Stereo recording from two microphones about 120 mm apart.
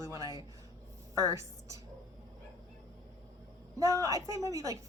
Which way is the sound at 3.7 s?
30° right (ahead or behind).